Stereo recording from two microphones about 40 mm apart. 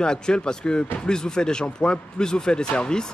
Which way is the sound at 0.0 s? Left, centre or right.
Left.